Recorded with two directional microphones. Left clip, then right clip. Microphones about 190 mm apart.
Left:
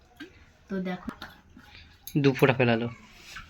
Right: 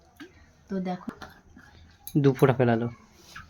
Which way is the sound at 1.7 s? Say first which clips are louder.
Right 2 dB; 20° right (ahead or behind).